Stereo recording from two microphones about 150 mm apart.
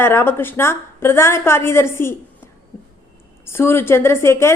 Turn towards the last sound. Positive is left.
turn(degrees=15)  # may be behind; listen again after turning